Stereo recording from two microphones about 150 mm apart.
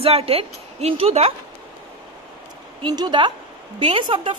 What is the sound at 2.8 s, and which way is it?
A woman's voice, 30° right (ahead or behind).